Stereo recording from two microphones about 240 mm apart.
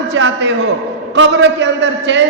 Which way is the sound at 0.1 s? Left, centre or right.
Right.